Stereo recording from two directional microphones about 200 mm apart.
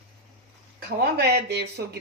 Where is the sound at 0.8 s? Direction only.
55° right (ahead or behind).